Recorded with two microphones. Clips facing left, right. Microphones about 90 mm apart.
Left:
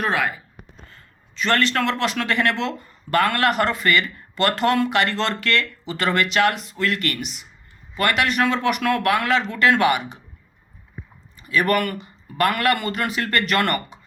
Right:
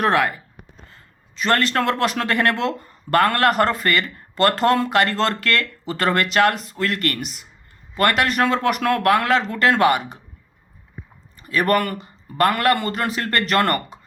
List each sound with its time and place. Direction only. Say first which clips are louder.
0.0 s speech: right 4 dB; 60° right (ahead or behind)
0.9 s speech: even; 35° right (ahead or behind)
11.3 s speech: right 1 dB; 40° right (ahead or behind)